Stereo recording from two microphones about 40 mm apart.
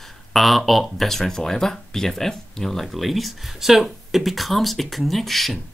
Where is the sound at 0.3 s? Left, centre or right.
Centre.